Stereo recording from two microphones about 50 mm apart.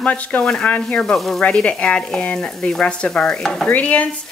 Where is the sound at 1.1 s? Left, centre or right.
Centre.